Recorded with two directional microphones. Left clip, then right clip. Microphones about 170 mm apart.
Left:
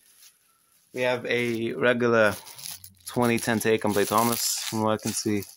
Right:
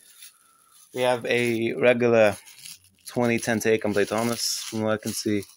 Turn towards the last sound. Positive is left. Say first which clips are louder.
# right 1 dB
turn(degrees=0)  # may be behind; listen again after turning